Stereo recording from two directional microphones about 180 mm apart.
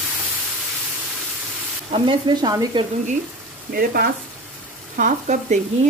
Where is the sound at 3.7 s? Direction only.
55° right (ahead or behind).